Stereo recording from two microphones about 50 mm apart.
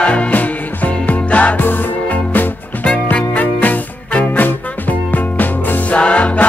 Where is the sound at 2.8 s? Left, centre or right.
Left.